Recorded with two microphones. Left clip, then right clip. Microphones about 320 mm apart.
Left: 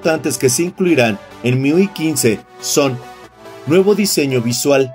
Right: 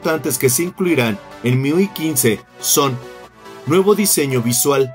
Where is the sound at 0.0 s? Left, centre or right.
Centre.